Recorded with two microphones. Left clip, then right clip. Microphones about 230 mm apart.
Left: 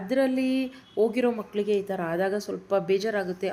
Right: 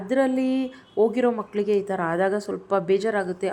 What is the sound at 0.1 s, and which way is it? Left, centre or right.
Speech, centre.